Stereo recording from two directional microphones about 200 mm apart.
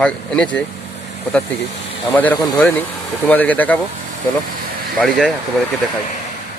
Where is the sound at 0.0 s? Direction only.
5° left (ahead or behind).